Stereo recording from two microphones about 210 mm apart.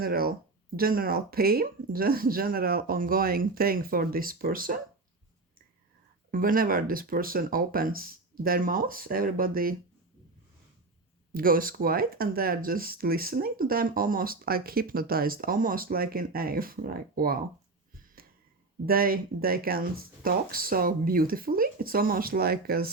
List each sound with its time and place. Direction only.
0.0 s speech: 45° right (ahead or behind)
6.3 s speech: 40° right (ahead or behind)
11.3 s speech: 45° right (ahead or behind)
18.9 s speech: 45° right (ahead or behind)